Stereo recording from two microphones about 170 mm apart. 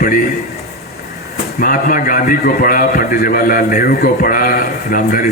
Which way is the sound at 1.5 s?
55° left (ahead or behind).